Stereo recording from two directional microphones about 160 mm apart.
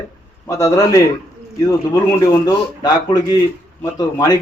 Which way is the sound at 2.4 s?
25° left (ahead or behind).